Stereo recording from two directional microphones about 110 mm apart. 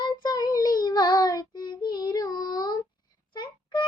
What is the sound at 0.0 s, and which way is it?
Child singing, 40° left (ahead or behind).